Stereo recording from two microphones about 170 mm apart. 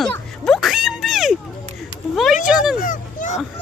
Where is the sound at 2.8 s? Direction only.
50° left (ahead or behind).